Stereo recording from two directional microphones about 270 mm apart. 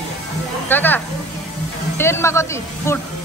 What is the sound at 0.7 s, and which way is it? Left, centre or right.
Speech, centre.